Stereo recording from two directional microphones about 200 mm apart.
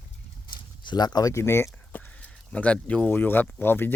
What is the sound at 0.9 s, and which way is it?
Speech, 20° left (ahead or behind).